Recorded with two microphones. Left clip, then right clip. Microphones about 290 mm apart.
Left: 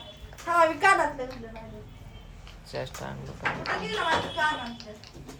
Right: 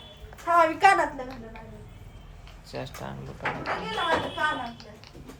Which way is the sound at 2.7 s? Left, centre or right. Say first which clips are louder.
Left 1 dB; centre.